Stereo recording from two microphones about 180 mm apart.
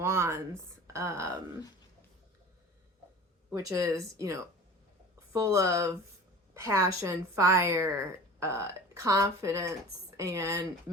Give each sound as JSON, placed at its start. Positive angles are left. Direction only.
{"t": 0.0, "sound": "a woman's voice", "side_deg": -15}
{"t": 3.5, "sound": "a woman's voice", "side_deg": -20}